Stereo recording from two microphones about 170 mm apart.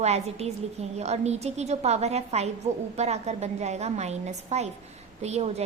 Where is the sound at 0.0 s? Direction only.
40° right (ahead or behind).